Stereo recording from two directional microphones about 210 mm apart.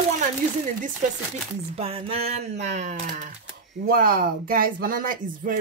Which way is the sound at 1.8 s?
25° right (ahead or behind).